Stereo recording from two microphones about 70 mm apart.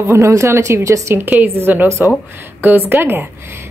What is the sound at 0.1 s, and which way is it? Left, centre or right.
A woman's voice, right.